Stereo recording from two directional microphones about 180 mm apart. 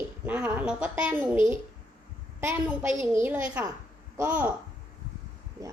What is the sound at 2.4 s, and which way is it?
A child's voice, 10° right (ahead or behind).